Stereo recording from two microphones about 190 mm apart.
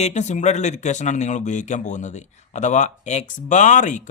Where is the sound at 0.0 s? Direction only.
35° left (ahead or behind).